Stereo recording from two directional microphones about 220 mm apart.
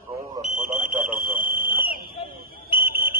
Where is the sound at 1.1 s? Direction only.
40° right (ahead or behind).